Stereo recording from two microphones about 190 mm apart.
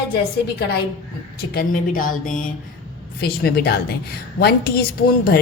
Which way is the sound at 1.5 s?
50° left (ahead or behind).